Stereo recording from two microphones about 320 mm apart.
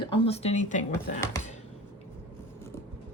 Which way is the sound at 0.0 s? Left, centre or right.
Centre.